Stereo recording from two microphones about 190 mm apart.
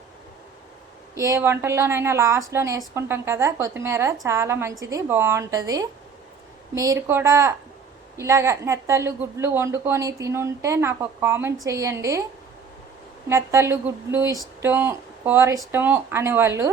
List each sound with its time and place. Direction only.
1.1 s a woman's voice: 15° right (ahead or behind)
13.2 s a woman's voice: 15° right (ahead or behind)